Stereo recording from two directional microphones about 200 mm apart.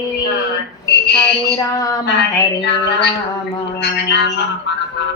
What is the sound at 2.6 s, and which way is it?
Speech, 60° left (ahead or behind).